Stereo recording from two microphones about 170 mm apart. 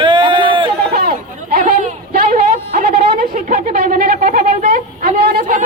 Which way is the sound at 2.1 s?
60° right (ahead or behind).